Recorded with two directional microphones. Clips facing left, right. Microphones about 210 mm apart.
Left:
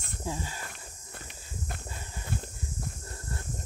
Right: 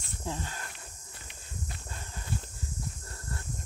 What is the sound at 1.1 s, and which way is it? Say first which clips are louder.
Walk: left 3 dB; 55° left (ahead or behind).